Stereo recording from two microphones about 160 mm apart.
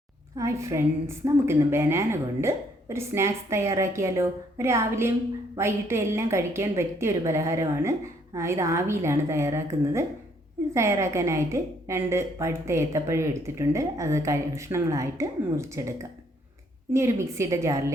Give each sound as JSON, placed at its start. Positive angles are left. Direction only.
{"t": 0.3, "sound": "a woman's voice", "side_deg": -20}
{"t": 16.9, "sound": "a woman's voice", "side_deg": -15}